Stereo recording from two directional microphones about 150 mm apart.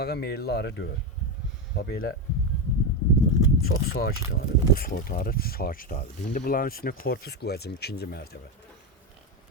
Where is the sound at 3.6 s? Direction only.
90° left.